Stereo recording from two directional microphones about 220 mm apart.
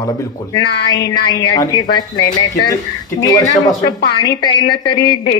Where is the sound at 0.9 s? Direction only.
15° left (ahead or behind).